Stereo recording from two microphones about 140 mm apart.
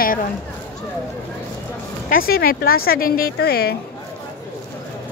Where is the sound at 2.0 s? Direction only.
90° left.